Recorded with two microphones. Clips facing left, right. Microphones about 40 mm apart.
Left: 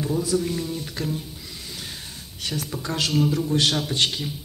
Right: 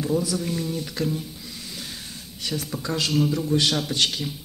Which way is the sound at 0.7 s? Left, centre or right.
Left.